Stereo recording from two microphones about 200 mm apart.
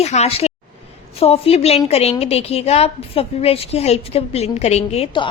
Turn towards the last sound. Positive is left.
turn(degrees=25)  # may be behind; listen again after turning